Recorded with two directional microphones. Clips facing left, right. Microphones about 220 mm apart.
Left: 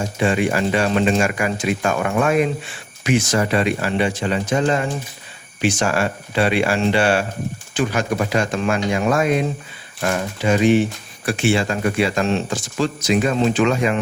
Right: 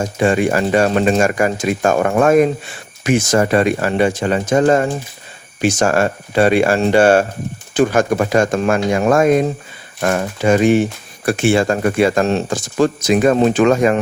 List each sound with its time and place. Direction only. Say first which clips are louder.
0.0 s speech: right 4 dB; 45° right (ahead or behind)